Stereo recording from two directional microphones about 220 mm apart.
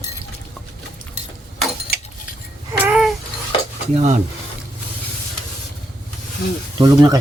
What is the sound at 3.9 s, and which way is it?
Speech, 30° right (ahead or behind).